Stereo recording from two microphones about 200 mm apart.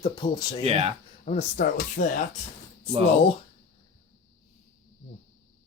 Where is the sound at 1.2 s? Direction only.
40° left (ahead or behind).